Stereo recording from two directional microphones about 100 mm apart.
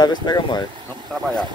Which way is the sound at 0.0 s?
45° left (ahead or behind).